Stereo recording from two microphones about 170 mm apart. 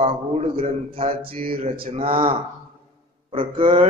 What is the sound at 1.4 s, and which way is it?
Speech, 60° right (ahead or behind).